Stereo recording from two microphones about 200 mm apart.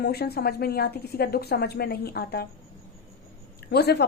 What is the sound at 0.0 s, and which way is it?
A woman's voice, 55° left (ahead or behind).